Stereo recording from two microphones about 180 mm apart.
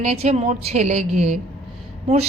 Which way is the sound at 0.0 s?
35° right (ahead or behind).